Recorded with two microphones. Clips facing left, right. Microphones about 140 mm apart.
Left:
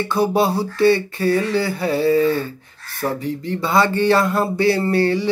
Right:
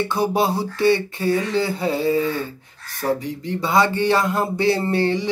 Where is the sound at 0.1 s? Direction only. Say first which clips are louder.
Left 2 dB; 20° right (ahead or behind).